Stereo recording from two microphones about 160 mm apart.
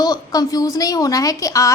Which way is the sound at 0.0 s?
25° left (ahead or behind).